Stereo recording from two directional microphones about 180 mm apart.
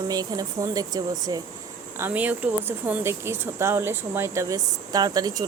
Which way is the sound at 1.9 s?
10° right (ahead or behind).